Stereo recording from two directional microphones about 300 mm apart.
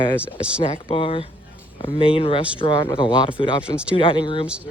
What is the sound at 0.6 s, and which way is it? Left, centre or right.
Speech, centre.